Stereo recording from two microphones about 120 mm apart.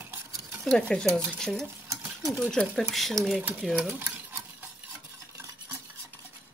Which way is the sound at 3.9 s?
15° right (ahead or behind).